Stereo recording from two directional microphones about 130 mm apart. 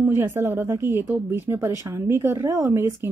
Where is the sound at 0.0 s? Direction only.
20° right (ahead or behind).